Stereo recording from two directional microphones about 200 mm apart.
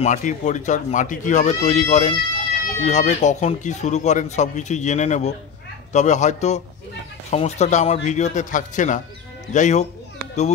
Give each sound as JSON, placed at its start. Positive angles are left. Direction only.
{"t": 0.0, "sound": "speech", "side_deg": 40}